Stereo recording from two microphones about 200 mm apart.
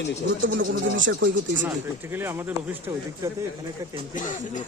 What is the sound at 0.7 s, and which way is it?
Speech, 70° right (ahead or behind).